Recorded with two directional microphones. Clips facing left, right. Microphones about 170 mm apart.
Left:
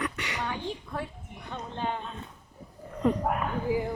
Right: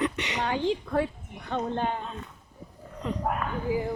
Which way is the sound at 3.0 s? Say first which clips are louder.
Left 7 dB; 50° left (ahead or behind).